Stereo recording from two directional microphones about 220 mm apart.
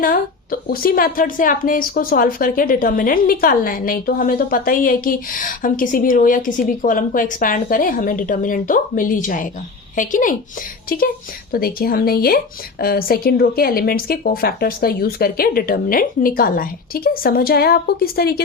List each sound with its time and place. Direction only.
0.0 s a woman's voice: 40° left (ahead or behind)